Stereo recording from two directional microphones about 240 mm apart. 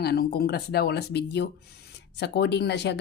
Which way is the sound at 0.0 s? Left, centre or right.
Left.